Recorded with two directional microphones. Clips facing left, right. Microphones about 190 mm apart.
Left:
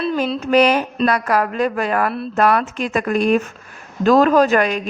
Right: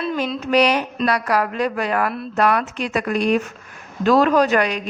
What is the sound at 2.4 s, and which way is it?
A woman's voice, 50° left (ahead or behind).